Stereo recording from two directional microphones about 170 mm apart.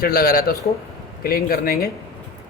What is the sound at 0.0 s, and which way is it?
Speech, 60° left (ahead or behind).